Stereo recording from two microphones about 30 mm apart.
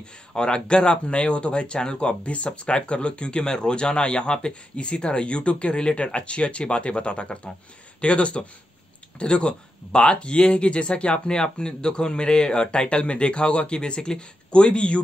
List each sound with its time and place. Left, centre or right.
0.3 s speech: left
11.3 s speech: left